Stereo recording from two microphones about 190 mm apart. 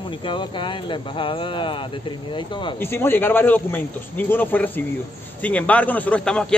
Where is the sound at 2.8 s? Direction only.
10° left (ahead or behind).